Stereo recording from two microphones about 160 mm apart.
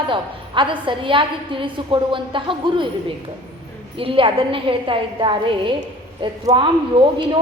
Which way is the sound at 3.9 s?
35° right (ahead or behind).